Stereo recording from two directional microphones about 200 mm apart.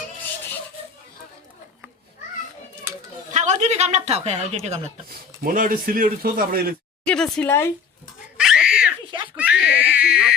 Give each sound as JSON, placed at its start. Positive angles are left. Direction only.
{"t": 3.3, "sound": "a woman's voice", "side_deg": -35}
{"t": 5.0, "sound": "speech", "side_deg": -45}
{"t": 7.0, "sound": "speech", "side_deg": 5}
{"t": 8.4, "sound": "giggle", "side_deg": -5}
{"t": 9.3, "sound": "a sound", "side_deg": -5}